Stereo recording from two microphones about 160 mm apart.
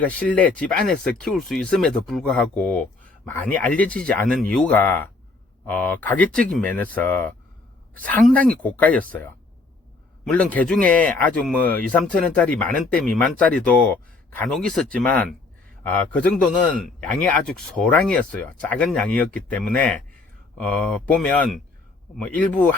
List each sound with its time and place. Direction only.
0.0 s speech: 10° left (ahead or behind)